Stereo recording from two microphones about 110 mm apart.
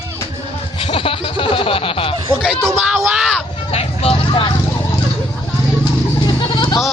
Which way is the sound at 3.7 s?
65° left (ahead or behind).